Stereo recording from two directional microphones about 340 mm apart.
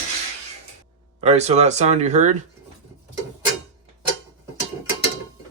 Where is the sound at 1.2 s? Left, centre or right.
Centre.